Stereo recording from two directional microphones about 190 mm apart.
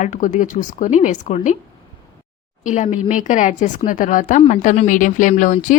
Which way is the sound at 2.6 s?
40° left (ahead or behind).